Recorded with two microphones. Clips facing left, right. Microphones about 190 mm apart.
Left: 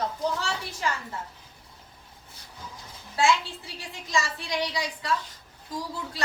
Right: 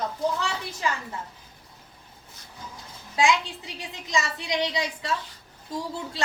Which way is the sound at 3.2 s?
15° right (ahead or behind).